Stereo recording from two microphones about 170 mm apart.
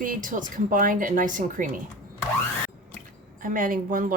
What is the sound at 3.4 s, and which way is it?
Wind chime, 55° right (ahead or behind).